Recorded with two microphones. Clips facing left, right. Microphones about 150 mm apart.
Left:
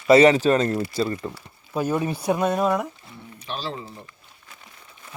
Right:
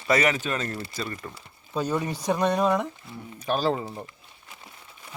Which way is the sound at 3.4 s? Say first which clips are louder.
Right 7 dB; 45° right (ahead or behind).